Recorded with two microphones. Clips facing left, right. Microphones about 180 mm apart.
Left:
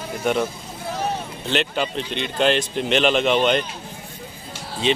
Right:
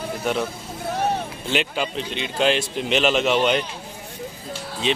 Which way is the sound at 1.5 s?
5° right (ahead or behind).